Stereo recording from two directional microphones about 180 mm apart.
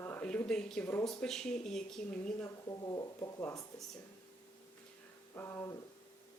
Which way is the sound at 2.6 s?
20° left (ahead or behind).